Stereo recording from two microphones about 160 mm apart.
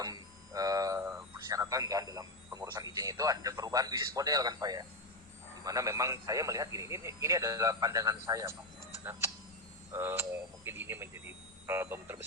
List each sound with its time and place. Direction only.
0.0 s a sound: 20° right (ahead or behind)
2.9 s a man's voice: 20° right (ahead or behind)
9.9 s speech: 15° right (ahead or behind)